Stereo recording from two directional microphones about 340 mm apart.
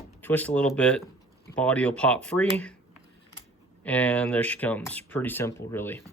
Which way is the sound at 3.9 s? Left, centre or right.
Centre.